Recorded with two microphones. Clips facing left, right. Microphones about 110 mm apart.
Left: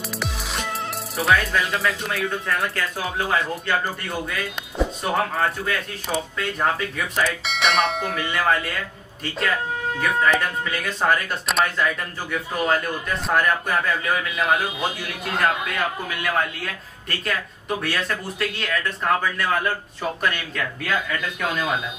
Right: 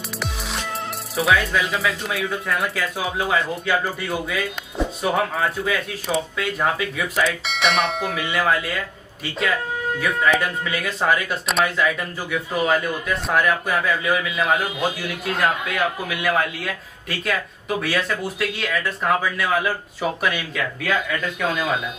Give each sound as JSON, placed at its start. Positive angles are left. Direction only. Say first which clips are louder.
{"t": 1.1, "sound": "speech", "louder": "right 1 dB", "side_deg": 0}